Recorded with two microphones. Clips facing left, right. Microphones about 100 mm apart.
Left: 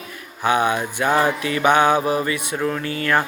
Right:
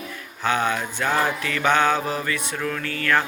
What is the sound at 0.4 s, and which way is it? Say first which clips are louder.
Speech: left 4 dB; 15° left (ahead or behind).